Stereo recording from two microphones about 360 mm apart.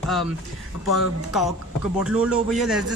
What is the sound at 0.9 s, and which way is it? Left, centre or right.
Speech, centre.